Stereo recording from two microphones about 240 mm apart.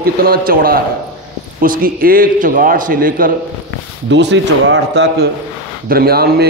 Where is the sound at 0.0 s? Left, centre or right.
Right.